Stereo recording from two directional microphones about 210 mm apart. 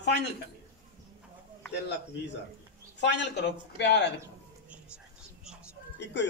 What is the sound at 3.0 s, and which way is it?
A man's voice, 55° left (ahead or behind).